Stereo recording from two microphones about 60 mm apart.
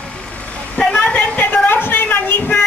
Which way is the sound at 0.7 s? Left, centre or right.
Centre.